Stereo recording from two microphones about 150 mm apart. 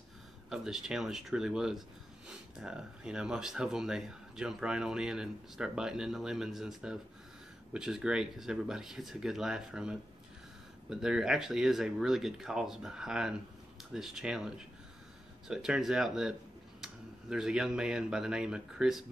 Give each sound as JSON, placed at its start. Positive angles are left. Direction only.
{"t": 0.5, "sound": "speech", "side_deg": -5}